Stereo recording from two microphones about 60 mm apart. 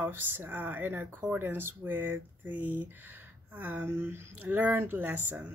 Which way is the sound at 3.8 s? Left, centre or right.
Right.